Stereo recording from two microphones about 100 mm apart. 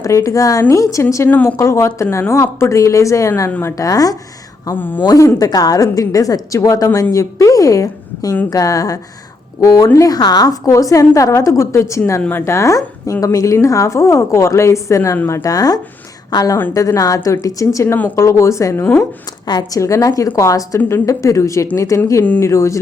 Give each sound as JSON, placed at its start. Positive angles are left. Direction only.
{"t": 0.0, "sound": "a woman's voice", "side_deg": 30}
{"t": 1.3, "sound": "speech", "side_deg": 15}
{"t": 1.6, "sound": "a woman's voice", "side_deg": 30}
{"t": 4.8, "sound": "a woman's voice", "side_deg": 20}
{"t": 5.0, "sound": "a woman's voice", "side_deg": 35}
{"t": 10.1, "sound": "a woman's voice", "side_deg": 40}
{"t": 19.5, "sound": "a woman's voice", "side_deg": 45}
{"t": 19.8, "sound": "a woman's voice", "side_deg": 30}